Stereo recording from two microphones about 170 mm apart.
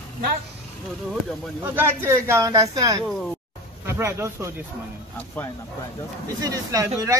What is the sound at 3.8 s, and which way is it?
Speech, 15° right (ahead or behind).